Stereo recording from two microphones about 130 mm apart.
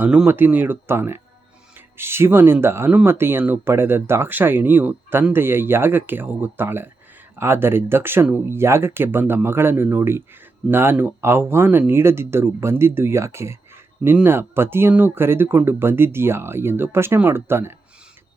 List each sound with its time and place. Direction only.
0.0 s speech: 10° right (ahead or behind)